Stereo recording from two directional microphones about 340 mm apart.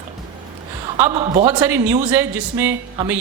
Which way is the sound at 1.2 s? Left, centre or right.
Centre.